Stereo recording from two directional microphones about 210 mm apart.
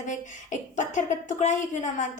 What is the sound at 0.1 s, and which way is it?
A woman's voice, 35° left (ahead or behind).